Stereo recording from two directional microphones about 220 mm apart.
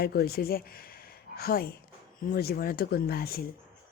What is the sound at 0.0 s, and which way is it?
Speech, 45° left (ahead or behind).